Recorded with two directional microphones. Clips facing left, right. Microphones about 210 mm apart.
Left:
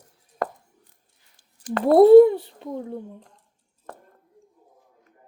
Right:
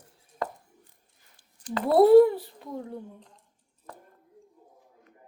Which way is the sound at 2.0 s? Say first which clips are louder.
Left 5 dB; 20° left (ahead or behind).